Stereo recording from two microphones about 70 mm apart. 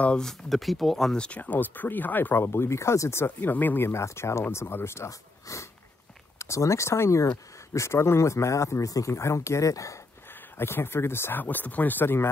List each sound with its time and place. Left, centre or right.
0.0 s speech: centre
1.1 s speech: centre; by 3.3 s left
3.3 s speech: left
10.6 s speech: left
11.4 s speech: left